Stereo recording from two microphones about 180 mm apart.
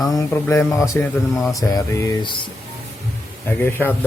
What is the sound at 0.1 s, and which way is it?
Speech, 15° left (ahead or behind).